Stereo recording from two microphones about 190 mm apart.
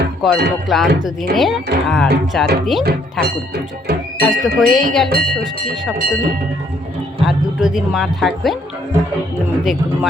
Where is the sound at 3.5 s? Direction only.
55° right (ahead or behind).